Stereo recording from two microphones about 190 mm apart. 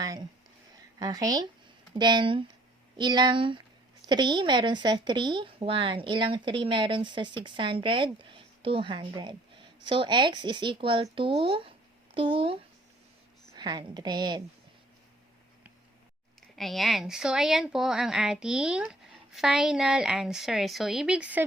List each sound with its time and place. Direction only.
0.0 s a sound: 20° right (ahead or behind)
0.9 s a woman's voice: 20° right (ahead or behind)
16.6 s speech: centre (ahead or behind)